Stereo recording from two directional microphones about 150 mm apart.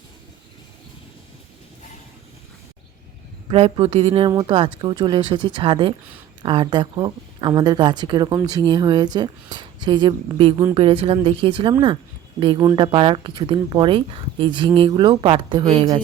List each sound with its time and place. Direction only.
3.5 s speech: 40° right (ahead or behind)
4.3 s speech: 20° right (ahead or behind)
4.5 s speech: 35° right (ahead or behind)